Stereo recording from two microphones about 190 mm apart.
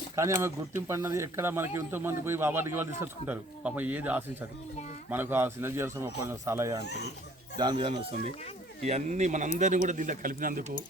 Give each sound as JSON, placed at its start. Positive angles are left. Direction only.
{"t": 0.2, "sound": "speech", "side_deg": -15}
{"t": 6.8, "sound": "speech", "side_deg": 60}
{"t": 7.6, "sound": "speech", "side_deg": -25}